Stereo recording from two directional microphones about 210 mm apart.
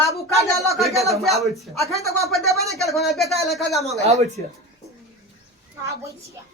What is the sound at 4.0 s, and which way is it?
Speech, 30° right (ahead or behind).